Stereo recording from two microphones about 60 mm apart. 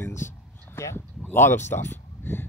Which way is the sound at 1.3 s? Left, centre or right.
Left.